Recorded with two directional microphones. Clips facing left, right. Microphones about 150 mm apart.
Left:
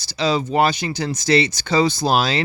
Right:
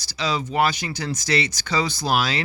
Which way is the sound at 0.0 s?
25° left (ahead or behind).